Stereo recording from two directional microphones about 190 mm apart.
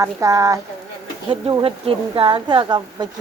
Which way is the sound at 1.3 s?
30° right (ahead or behind).